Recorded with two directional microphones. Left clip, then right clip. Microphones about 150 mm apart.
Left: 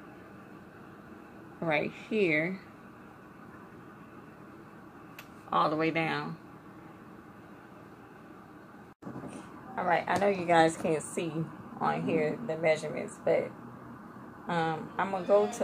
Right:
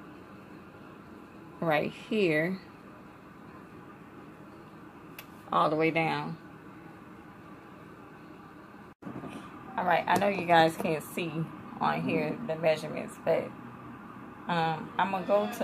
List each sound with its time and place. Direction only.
1.6 s a woman's voice: 15° right (ahead or behind)
5.5 s speech: 5° right (ahead or behind)
9.8 s speech: 10° left (ahead or behind)